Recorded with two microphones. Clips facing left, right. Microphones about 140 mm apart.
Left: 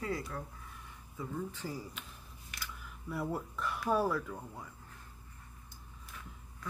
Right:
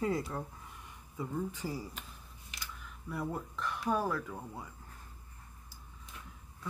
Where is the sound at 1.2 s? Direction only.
10° right (ahead or behind).